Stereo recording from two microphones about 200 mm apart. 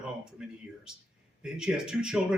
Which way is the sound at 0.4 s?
5° right (ahead or behind).